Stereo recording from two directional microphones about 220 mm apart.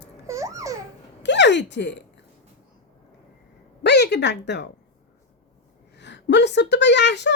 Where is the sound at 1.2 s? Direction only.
55° left (ahead or behind).